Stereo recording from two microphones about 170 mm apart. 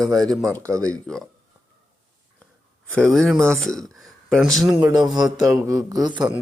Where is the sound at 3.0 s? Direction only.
Centre (ahead or behind).